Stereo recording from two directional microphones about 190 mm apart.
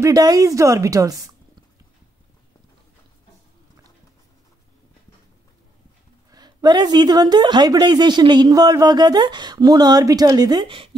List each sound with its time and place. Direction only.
0.0 s speech: 20° right (ahead or behind)
6.3 s a woman's voice: 20° right (ahead or behind)